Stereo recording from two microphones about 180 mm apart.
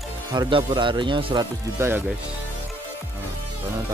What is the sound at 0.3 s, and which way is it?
Speech, 25° right (ahead or behind).